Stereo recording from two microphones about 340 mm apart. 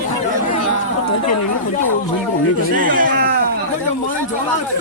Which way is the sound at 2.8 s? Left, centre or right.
Right.